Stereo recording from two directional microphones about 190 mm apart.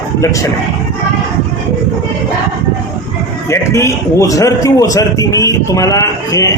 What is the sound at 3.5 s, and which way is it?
A man's voice, 15° left (ahead or behind).